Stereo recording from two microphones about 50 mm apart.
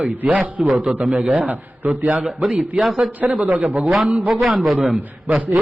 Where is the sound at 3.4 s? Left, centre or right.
Right.